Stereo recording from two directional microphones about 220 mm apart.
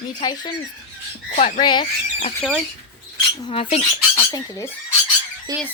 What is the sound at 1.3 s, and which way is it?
Speech, 35° left (ahead or behind).